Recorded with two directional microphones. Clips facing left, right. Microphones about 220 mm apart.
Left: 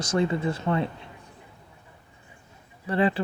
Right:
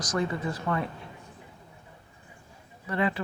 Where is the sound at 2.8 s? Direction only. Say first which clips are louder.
Left 4 dB; 30° left (ahead or behind).